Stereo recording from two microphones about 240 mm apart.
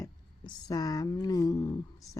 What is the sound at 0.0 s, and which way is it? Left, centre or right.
Speech, centre.